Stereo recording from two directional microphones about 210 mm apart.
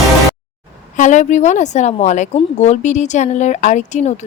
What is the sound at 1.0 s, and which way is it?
A woman's voice, 35° left (ahead or behind).